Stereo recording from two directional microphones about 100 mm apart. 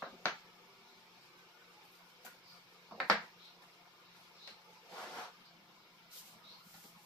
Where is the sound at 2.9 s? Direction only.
Centre (ahead or behind).